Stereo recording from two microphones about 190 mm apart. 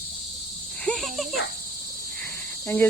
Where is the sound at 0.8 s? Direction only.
Centre (ahead or behind).